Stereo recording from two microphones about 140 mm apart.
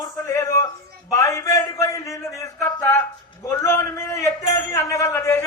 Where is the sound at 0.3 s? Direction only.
20° left (ahead or behind).